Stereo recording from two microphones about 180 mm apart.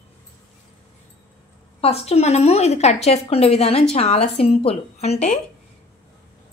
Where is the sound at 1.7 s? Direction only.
35° left (ahead or behind).